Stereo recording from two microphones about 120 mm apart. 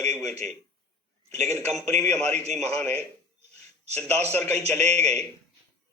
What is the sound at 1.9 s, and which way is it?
Speech, 65° right (ahead or behind).